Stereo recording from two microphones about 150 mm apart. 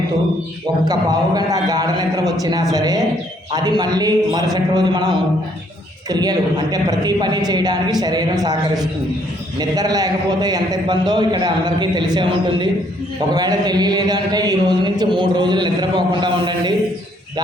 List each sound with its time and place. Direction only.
0.9 s a man's voice: 25° right (ahead or behind)